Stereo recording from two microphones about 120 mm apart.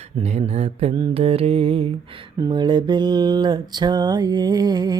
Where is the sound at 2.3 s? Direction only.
35° right (ahead or behind).